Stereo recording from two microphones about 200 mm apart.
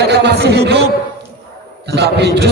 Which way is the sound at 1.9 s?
55° right (ahead or behind).